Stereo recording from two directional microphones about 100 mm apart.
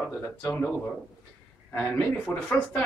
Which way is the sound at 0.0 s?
25° left (ahead or behind).